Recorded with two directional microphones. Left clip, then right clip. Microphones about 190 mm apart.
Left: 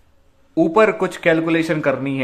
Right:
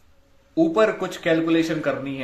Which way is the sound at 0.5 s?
30° left (ahead or behind).